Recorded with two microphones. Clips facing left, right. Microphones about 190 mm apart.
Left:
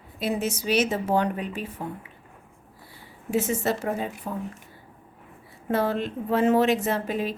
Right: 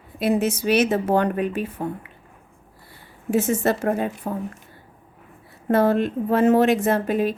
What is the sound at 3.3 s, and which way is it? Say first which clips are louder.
Speech: right 4 dB; 50° right (ahead or behind).